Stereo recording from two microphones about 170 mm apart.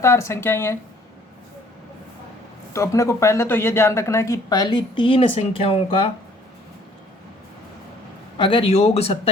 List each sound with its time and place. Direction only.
0.0 s speech: 15° left (ahead or behind)
2.7 s a woman's voice: 20° left (ahead or behind)
8.4 s speech: 30° left (ahead or behind)